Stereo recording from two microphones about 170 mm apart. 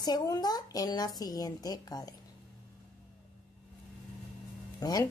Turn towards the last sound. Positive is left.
turn(degrees=20)  # may be behind; listen again after turning